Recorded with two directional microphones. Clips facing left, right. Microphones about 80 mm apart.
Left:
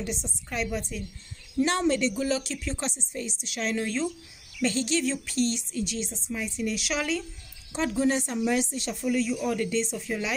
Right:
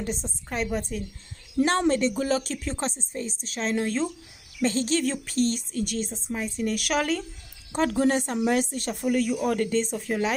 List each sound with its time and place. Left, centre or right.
0.0 s a woman's voice: right